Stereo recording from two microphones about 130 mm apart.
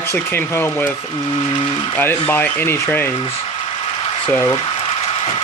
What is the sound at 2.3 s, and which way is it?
Speech, 15° left (ahead or behind).